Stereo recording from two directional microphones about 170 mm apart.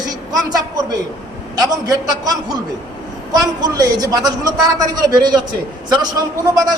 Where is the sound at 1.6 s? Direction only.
20° right (ahead or behind).